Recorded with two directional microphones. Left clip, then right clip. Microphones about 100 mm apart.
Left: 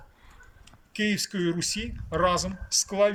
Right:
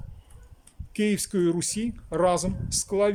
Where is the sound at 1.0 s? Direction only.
40° right (ahead or behind).